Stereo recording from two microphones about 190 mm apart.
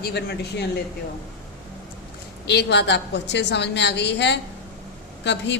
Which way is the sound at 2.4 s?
60° left (ahead or behind).